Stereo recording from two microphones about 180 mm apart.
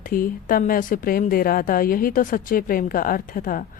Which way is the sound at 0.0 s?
50° left (ahead or behind).